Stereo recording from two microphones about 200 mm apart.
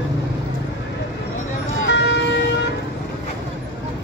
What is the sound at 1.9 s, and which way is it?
Vehicle, 60° left (ahead or behind).